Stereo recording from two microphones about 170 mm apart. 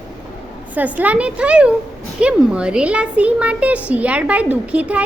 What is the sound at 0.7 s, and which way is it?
A child's voice, 10° right (ahead or behind).